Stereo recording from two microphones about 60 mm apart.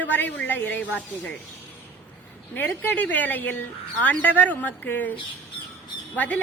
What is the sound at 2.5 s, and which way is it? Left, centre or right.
Speech, left.